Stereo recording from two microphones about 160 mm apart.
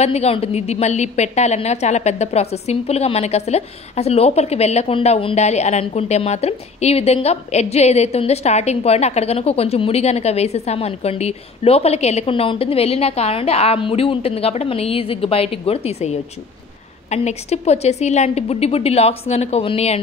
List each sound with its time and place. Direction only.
0.0 s a woman's voice: 40° left (ahead or behind)